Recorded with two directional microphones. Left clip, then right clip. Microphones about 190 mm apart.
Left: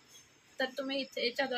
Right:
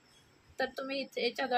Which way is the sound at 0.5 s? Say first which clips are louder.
Even; 55° right (ahead or behind).